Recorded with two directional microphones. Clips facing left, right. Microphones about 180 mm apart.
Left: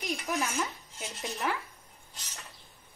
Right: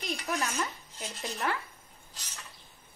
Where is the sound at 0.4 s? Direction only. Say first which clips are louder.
Left 1 dB; 15° left (ahead or behind).